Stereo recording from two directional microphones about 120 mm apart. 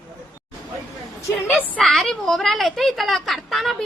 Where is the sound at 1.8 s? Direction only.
Centre (ahead or behind).